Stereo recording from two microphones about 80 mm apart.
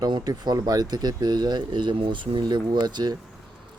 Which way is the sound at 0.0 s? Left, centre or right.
Right.